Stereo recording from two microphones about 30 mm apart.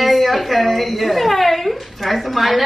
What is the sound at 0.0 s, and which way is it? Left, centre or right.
Speech, centre.